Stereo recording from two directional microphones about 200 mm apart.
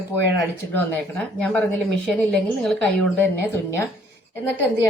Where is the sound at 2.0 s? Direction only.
Centre (ahead or behind).